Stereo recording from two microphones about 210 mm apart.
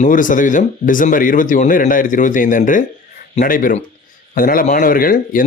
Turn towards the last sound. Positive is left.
turn(degrees=40)  # may be behind; listen again after turning